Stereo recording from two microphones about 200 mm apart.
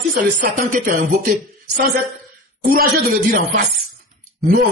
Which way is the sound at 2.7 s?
50° right (ahead or behind).